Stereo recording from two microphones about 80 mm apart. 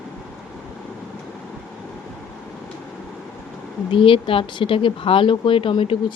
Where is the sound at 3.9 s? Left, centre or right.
Left.